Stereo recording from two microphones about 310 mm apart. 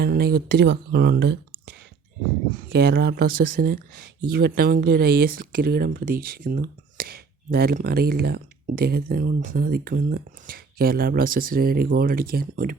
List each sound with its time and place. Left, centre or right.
0.0 s speech: right
2.7 s speech: right